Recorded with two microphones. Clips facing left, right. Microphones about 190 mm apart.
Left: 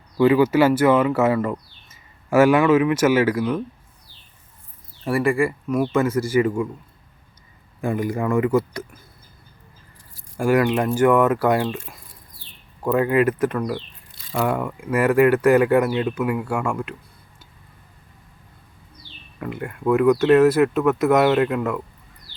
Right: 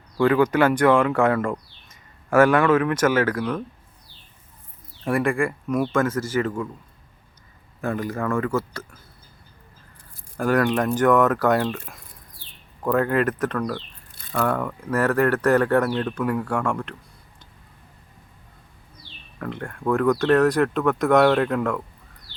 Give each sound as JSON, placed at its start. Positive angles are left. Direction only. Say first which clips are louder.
{"t": 0.2, "sound": "speech", "louder": "left 3 dB", "side_deg": 5}
{"t": 5.0, "sound": "speech", "louder": "left 2 dB", "side_deg": 0}
{"t": 7.8, "sound": "speech", "louder": "left 3 dB", "side_deg": 15}
{"t": 10.3, "sound": "speech", "louder": "left 2 dB", "side_deg": 10}
{"t": 19.4, "sound": "speech", "louder": "left 2 dB", "side_deg": 5}